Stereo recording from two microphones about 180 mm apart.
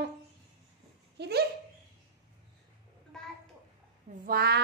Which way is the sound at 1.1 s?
70° right (ahead or behind).